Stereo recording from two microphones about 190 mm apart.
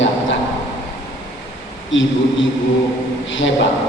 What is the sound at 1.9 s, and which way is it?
Speech, 80° left.